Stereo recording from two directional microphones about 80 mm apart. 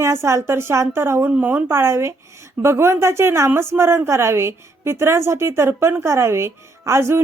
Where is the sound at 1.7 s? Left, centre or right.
Right.